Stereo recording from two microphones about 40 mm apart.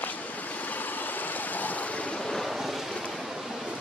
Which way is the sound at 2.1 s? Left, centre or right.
Centre.